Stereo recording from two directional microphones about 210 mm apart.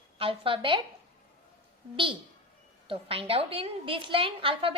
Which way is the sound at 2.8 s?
25° right (ahead or behind).